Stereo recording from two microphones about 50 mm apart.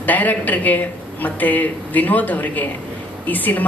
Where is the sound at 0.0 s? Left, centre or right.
Left.